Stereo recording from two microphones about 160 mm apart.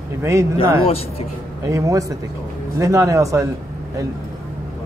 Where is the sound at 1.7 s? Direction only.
20° right (ahead or behind).